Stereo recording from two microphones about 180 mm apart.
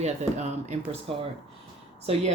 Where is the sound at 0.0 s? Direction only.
40° right (ahead or behind).